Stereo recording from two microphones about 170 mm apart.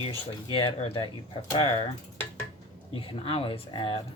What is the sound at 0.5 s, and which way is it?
Speech, 35° left (ahead or behind).